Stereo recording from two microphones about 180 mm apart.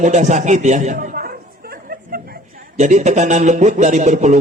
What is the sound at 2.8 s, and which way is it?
Speech, 40° right (ahead or behind).